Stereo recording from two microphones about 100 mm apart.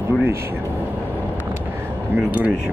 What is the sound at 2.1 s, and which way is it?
Speech, 15° right (ahead or behind).